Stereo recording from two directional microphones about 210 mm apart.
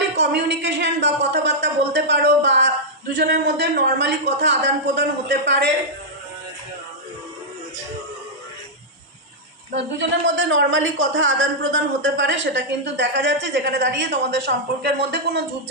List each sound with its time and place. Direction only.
0.2 s speech: 55° right (ahead or behind)
9.7 s speech: 60° right (ahead or behind)